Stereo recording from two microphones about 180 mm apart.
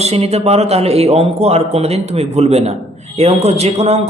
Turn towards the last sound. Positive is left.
turn(degrees=-35)  # may be behind; listen again after turning